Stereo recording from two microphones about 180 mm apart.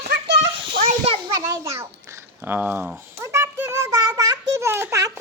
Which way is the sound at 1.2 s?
15° right (ahead or behind).